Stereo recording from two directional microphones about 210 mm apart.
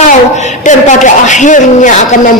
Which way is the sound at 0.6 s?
35° left (ahead or behind).